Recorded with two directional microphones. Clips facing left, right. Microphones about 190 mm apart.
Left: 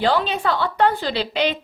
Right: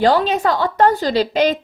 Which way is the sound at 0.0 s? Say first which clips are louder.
Right 5 dB; 45° right (ahead or behind).